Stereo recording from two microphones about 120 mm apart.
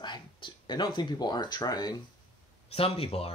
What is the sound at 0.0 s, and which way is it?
Speech, 40° left (ahead or behind).